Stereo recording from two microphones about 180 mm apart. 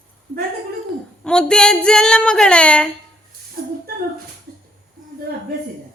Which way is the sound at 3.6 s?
55° right (ahead or behind).